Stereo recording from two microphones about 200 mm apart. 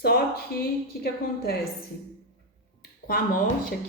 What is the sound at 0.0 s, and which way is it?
Speech, 50° left (ahead or behind).